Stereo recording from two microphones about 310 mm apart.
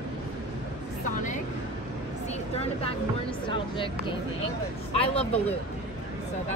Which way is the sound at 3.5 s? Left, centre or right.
Centre.